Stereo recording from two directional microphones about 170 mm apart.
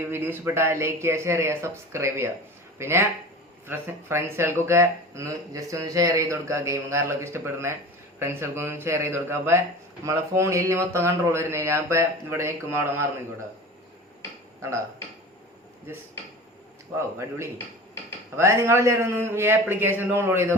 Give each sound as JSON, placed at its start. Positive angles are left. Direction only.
{"t": 0.1, "sound": "speech", "side_deg": -10}
{"t": 17.2, "sound": "speech", "side_deg": -15}